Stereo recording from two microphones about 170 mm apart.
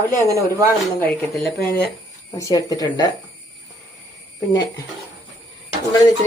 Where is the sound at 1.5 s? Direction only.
70° left (ahead or behind).